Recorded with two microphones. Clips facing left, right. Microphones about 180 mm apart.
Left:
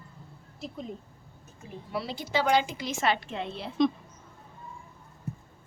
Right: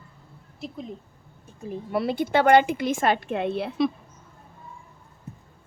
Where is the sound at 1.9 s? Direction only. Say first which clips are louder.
Right 8 dB; 55° right (ahead or behind).